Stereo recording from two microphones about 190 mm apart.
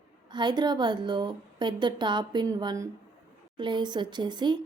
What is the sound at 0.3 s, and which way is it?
A woman's voice, 25° right (ahead or behind).